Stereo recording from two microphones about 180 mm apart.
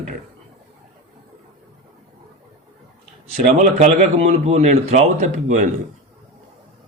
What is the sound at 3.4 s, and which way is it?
Speech, 45° right (ahead or behind).